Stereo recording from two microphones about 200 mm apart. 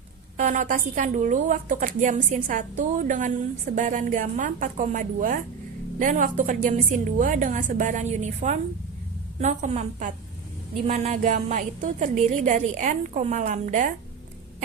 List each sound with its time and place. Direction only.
0.3 s a woman's voice: 40° right (ahead or behind)